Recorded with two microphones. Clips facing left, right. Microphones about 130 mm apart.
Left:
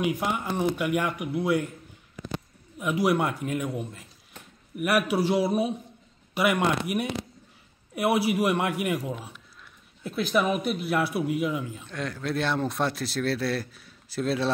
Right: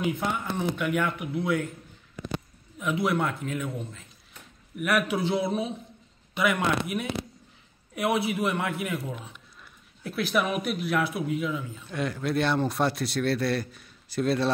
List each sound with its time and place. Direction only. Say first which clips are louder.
0.0 s speech: left 1 dB; 10° left (ahead or behind)
2.8 s speech: left 2 dB; 10° left (ahead or behind)
9.1 s speech: left 3 dB; centre (ahead or behind)
11.9 s speech: right 3 dB; 5° right (ahead or behind)